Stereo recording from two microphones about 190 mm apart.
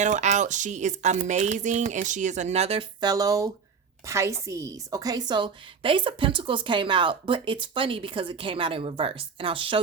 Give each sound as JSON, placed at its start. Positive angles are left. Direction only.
{"t": 0.0, "sound": "a woman's voice", "side_deg": -40}